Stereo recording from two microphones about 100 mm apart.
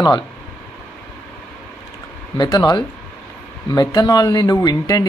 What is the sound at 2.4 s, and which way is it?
Speech, 40° left (ahead or behind).